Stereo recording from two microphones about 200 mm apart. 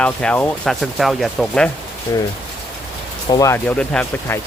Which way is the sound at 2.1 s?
15° left (ahead or behind).